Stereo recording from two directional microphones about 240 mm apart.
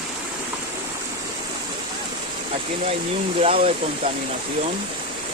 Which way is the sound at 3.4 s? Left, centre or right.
Right.